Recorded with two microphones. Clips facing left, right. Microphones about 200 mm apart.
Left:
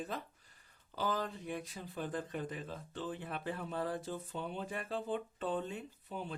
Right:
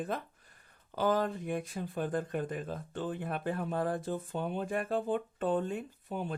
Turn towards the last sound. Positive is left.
turn(degrees=-50)  # may be behind; listen again after turning